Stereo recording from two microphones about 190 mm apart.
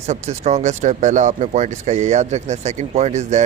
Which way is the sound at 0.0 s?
35° right (ahead or behind).